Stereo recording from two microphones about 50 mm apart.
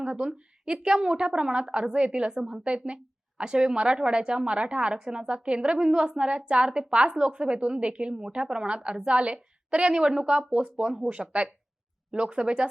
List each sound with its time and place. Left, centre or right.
0.0 s a woman's voice: centre